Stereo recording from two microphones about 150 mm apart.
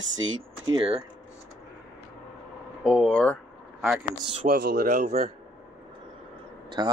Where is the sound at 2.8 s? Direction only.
Centre (ahead or behind).